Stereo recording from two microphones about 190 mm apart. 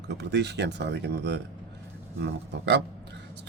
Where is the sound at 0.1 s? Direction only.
65° right (ahead or behind).